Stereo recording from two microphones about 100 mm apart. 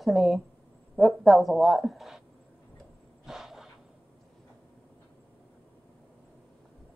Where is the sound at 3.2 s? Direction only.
5° right (ahead or behind).